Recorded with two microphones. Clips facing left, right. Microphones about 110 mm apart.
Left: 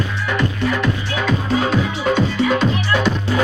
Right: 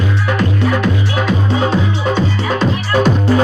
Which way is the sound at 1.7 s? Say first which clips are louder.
Right 2 dB; 35° right (ahead or behind).